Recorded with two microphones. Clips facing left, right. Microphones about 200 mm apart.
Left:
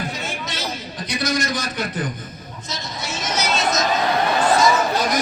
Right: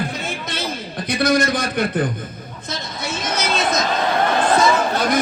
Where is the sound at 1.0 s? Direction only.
55° right (ahead or behind).